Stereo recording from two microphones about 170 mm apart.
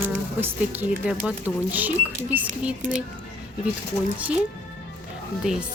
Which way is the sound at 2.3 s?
10° right (ahead or behind).